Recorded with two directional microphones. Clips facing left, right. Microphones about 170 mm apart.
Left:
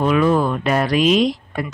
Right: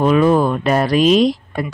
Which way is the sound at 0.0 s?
35° right (ahead or behind).